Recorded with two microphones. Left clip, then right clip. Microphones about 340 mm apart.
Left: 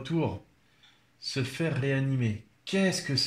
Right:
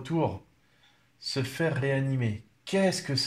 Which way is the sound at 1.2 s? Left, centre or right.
Centre.